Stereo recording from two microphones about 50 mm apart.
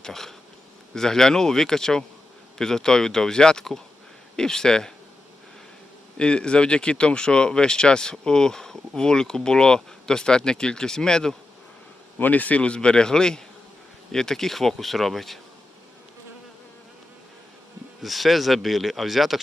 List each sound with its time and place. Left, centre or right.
0.0 s speech: centre
6.1 s speech: centre
12.2 s speech: left; by 15.4 s centre
18.0 s speech: centre